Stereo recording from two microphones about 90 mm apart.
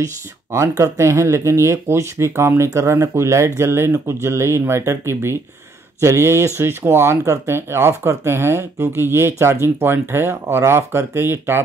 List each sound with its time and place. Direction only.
0.0 s speech: 35° right (ahead or behind)